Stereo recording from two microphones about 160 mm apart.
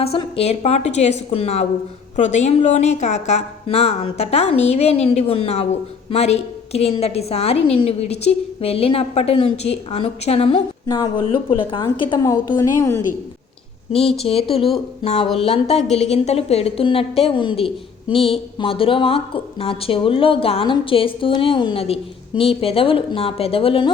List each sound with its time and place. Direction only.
0.0 s speech: 40° left (ahead or behind)
10.8 s speech: 25° left (ahead or behind)
13.9 s speech: 40° left (ahead or behind)